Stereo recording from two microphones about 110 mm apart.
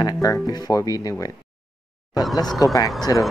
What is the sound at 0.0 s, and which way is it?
Speech, 35° left (ahead or behind).